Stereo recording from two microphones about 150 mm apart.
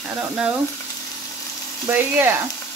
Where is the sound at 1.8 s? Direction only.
15° right (ahead or behind).